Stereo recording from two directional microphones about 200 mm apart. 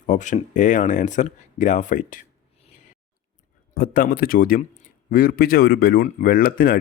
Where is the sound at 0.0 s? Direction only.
40° left (ahead or behind).